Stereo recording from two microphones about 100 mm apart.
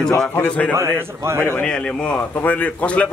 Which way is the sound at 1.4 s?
10° left (ahead or behind).